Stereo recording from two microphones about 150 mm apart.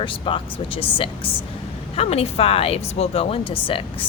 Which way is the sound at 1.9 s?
40° left (ahead or behind).